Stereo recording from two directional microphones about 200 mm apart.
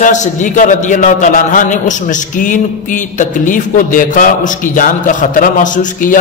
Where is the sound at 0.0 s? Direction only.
40° left (ahead or behind).